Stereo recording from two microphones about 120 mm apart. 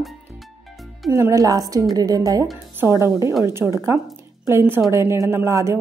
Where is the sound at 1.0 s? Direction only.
25° right (ahead or behind).